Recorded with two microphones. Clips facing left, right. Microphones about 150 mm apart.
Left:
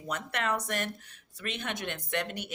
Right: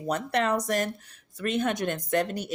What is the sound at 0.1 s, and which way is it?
Speech, 35° right (ahead or behind).